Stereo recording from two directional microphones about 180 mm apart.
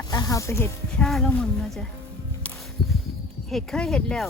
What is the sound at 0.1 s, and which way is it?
Speech, 20° left (ahead or behind).